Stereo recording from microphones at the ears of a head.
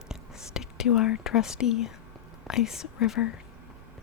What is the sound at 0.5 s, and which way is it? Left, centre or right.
Speech, left.